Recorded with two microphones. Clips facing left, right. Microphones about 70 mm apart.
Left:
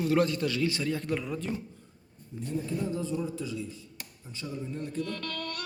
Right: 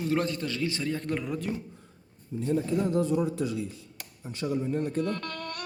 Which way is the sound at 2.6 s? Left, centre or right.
Right.